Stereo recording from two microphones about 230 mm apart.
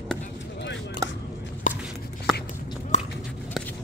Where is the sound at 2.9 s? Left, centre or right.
Left.